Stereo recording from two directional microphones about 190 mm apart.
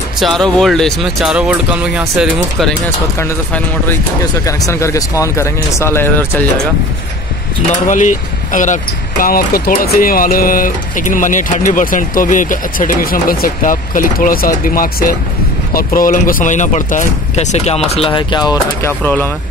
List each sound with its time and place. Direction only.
0.2 s speech: centre (ahead or behind)
3.2 s speech: 10° left (ahead or behind)
7.7 s speech: 40° left (ahead or behind); by 18.5 s 25° left (ahead or behind)
18.8 s speech: 10° left (ahead or behind)